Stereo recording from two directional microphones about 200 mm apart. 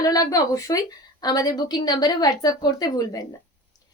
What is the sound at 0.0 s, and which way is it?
A woman's voice, 20° left (ahead or behind).